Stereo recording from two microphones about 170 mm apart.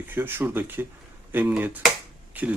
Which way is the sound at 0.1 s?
10° right (ahead or behind).